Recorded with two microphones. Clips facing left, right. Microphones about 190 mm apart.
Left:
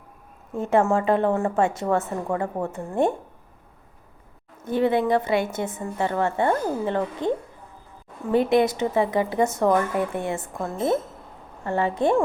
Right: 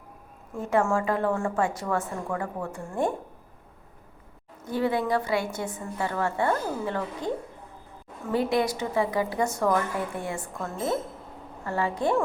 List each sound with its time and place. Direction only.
0.5 s a woman's voice: 25° left (ahead or behind)
4.6 s a woman's voice: 20° left (ahead or behind)